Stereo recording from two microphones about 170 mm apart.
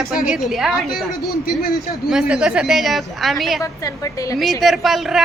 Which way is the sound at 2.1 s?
5° right (ahead or behind).